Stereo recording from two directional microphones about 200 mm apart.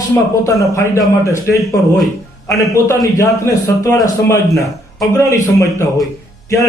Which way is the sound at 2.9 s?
15° left (ahead or behind).